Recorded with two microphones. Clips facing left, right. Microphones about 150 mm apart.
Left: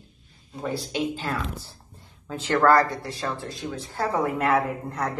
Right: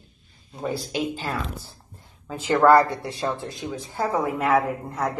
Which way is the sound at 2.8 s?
25° right (ahead or behind).